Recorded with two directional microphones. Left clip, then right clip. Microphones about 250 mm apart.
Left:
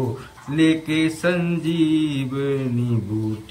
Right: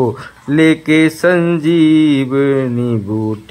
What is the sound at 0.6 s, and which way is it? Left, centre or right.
Mantra, centre.